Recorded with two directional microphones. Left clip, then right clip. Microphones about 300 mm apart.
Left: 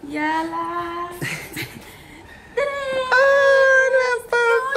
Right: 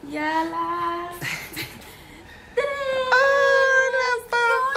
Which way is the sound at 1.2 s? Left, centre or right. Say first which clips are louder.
Left 1 dB; centre.